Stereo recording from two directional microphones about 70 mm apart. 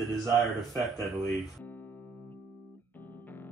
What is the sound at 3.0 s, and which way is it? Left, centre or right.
Music, left.